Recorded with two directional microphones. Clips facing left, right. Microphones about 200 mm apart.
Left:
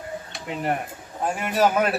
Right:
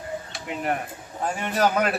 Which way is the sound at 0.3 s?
Centre (ahead or behind).